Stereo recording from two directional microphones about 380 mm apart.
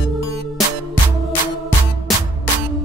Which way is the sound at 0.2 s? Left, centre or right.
Right.